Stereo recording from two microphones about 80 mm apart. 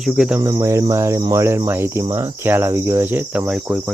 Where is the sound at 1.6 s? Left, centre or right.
Right.